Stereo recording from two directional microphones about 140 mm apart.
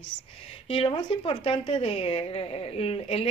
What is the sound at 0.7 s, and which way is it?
A woman's voice, 40° left (ahead or behind).